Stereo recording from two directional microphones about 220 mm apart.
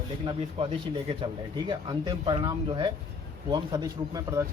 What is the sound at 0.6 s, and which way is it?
Speech, 30° right (ahead or behind).